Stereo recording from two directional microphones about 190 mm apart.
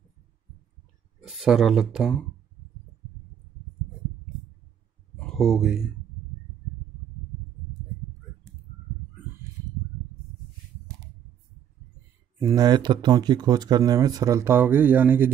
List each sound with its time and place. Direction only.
1.4 s speech: centre (ahead or behind)
5.1 s a sound: centre (ahead or behind)
12.4 s speech: 15° right (ahead or behind)